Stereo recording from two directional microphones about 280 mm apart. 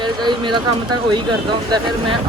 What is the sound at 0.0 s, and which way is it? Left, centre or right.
Speech, centre.